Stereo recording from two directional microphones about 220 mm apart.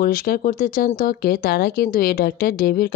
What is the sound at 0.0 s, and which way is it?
Speech, 40° left (ahead or behind).